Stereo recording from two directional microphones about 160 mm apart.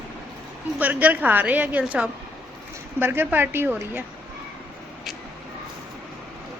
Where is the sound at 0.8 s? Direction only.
10° right (ahead or behind).